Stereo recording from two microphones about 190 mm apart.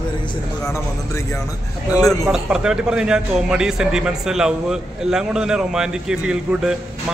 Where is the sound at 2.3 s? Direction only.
5° right (ahead or behind).